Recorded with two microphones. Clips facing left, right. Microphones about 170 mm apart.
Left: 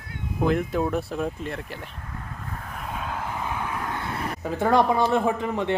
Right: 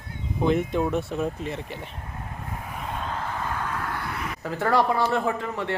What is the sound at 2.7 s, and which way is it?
Vehicle, centre (ahead or behind).